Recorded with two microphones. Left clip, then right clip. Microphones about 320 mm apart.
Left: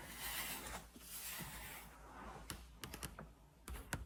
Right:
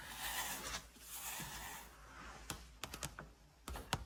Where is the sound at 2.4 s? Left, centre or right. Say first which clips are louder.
Right 4 dB; centre.